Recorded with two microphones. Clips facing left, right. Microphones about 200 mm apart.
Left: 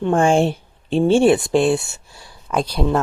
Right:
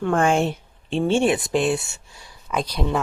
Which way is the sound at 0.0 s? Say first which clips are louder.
Left 4 dB; 25° left (ahead or behind).